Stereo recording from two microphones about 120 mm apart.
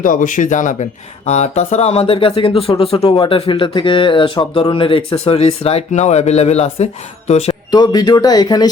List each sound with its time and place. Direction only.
0.1 s speech: 90° left
1.3 s speech: 70° left (ahead or behind)
7.7 s speech: 35° left (ahead or behind)